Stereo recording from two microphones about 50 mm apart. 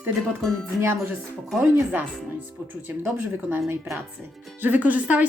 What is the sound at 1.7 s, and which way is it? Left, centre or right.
Speech, right.